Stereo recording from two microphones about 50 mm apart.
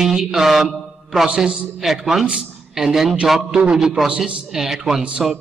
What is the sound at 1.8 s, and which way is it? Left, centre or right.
A man's voice, centre.